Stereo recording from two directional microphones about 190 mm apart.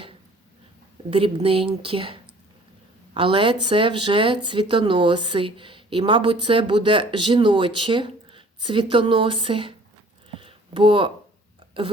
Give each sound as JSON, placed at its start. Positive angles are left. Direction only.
{"t": 1.1, "sound": "speech", "side_deg": -30}
{"t": 3.2, "sound": "speech", "side_deg": -25}
{"t": 10.3, "sound": "a sound", "side_deg": -25}